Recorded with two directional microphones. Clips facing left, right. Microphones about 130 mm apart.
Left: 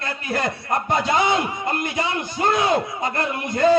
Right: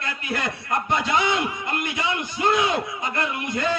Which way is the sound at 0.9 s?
40° left (ahead or behind).